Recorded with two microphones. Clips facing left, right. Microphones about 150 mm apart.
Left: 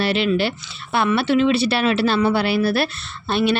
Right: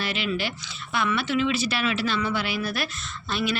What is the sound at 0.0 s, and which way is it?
A woman's voice, 30° left (ahead or behind).